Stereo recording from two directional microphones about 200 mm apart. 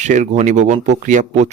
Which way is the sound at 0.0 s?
35° right (ahead or behind).